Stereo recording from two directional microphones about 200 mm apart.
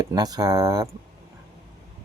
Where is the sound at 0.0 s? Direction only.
20° right (ahead or behind).